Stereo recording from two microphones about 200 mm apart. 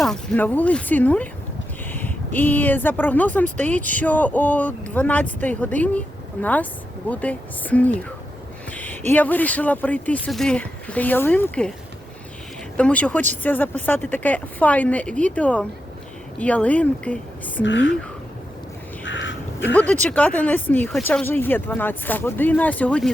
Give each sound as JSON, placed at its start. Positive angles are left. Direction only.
{"t": 0.0, "sound": "speech", "side_deg": 0}
{"t": 12.7, "sound": "speech", "side_deg": 5}
{"t": 17.6, "sound": "speech", "side_deg": 65}
{"t": 19.0, "sound": "crow", "side_deg": 65}
{"t": 19.7, "sound": "speech", "side_deg": 5}